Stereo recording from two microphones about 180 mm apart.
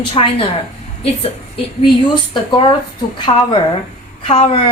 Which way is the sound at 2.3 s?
25° left (ahead or behind).